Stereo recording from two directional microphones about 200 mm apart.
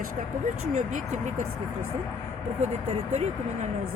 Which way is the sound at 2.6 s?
35° right (ahead or behind).